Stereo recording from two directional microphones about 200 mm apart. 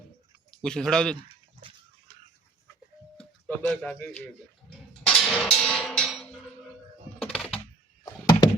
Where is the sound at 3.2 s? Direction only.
5° left (ahead or behind).